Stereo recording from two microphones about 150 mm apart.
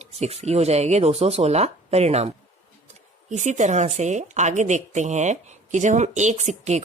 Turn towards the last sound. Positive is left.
turn(degrees=-50)  # may be behind; listen again after turning